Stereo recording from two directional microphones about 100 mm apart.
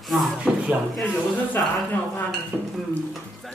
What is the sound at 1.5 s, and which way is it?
Speech, 20° left (ahead or behind).